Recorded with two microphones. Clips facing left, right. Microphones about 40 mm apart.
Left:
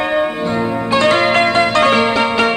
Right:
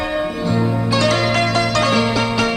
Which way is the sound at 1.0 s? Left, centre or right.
Left.